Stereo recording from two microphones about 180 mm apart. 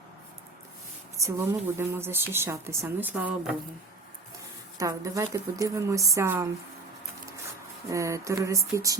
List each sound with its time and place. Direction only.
1.1 s a woman's voice: 15° right (ahead or behind)
4.8 s a woman's voice: 20° right (ahead or behind)
7.9 s a woman's voice: 15° right (ahead or behind)